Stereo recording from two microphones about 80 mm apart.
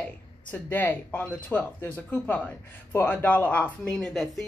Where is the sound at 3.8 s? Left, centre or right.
Centre.